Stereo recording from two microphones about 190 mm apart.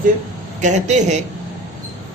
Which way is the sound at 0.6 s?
40° right (ahead or behind).